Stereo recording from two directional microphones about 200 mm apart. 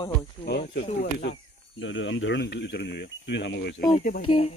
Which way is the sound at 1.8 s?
70° left (ahead or behind).